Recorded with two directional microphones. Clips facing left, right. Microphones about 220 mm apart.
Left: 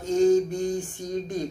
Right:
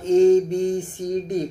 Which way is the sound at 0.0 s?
25° right (ahead or behind).